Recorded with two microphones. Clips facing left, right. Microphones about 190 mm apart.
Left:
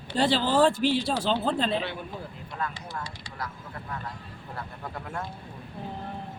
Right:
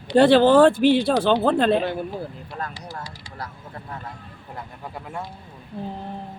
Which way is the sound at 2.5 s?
40° right (ahead or behind).